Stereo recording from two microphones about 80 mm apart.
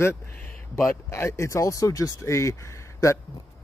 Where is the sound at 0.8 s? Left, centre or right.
Left.